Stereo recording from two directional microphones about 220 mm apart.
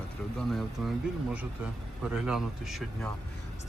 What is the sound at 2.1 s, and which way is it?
Speech, centre (ahead or behind).